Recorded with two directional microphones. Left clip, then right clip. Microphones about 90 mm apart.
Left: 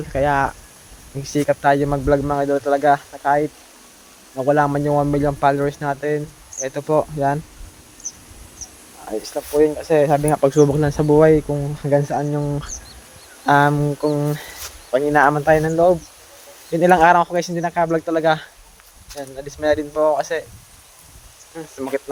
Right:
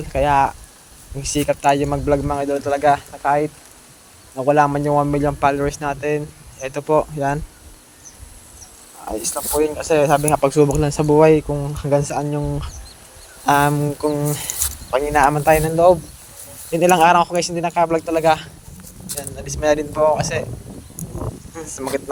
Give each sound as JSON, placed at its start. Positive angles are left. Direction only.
{"t": 0.1, "sound": "speech", "side_deg": 15}
{"t": 9.6, "sound": "speech", "side_deg": 0}
{"t": 10.5, "sound": "speech", "side_deg": 20}
{"t": 11.5, "sound": "speech", "side_deg": 0}
{"t": 13.4, "sound": "speech", "side_deg": 10}
{"t": 15.0, "sound": "speech", "side_deg": 10}
{"t": 16.8, "sound": "speech", "side_deg": 20}
{"t": 19.5, "sound": "speech", "side_deg": 0}
{"t": 21.5, "sound": "speech", "side_deg": 0}